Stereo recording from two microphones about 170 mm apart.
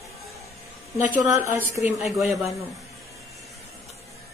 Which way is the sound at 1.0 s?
10° right (ahead or behind).